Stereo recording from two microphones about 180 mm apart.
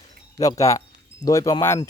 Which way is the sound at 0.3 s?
20° left (ahead or behind).